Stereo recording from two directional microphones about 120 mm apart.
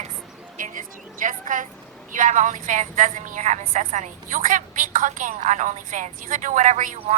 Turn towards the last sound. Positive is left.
turn(degrees=-90)